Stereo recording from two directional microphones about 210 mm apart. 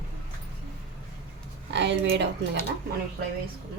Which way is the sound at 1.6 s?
55° right (ahead or behind).